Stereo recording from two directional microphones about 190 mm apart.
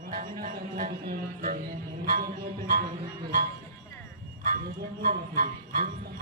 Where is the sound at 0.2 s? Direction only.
45° right (ahead or behind).